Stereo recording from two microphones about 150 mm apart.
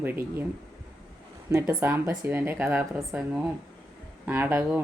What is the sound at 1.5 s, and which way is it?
Speech, 20° right (ahead or behind).